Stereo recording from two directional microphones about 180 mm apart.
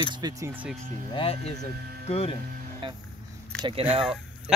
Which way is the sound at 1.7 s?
60° right (ahead or behind).